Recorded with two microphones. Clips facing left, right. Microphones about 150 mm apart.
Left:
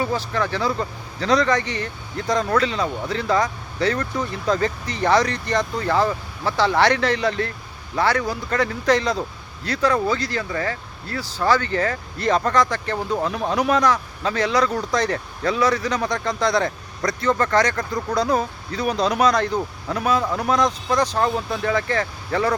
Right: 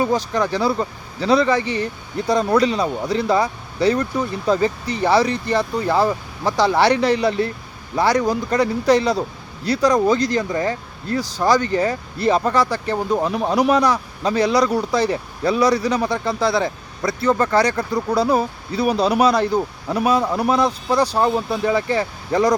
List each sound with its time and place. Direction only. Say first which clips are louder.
0.1 s speech: right 4 dB; 15° right (ahead or behind)